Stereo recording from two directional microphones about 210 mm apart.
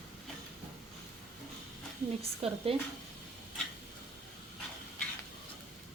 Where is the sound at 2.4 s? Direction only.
25° right (ahead or behind).